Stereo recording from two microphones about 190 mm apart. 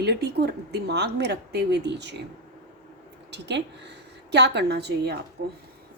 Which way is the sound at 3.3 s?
65° right (ahead or behind).